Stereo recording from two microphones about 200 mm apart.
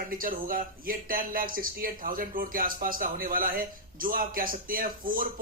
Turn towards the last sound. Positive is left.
turn(degrees=-45)  # may be behind; listen again after turning